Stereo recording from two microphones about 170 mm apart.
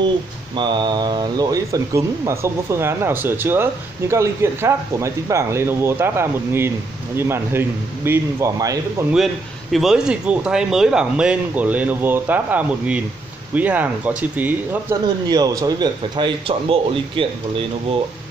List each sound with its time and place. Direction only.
0.6 s speech: 25° right (ahead or behind)
9.1 s speech: centre (ahead or behind)
15.2 s speech: 25° right (ahead or behind)